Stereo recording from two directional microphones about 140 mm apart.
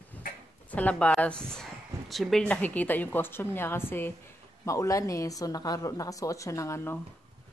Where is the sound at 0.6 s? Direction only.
10° left (ahead or behind).